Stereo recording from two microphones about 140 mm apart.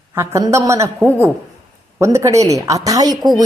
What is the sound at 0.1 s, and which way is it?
A woman's voice, 20° right (ahead or behind).